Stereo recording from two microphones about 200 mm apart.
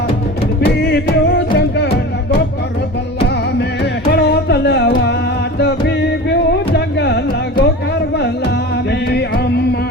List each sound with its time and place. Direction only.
0.6 s music: 55° left (ahead or behind)
4.0 s music: 55° left (ahead or behind)
8.9 s music: 55° left (ahead or behind)